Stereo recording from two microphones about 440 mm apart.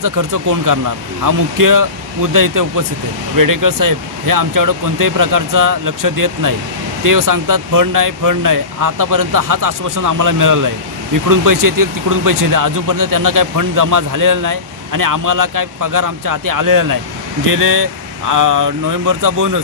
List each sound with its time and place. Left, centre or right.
0.0 s speech: right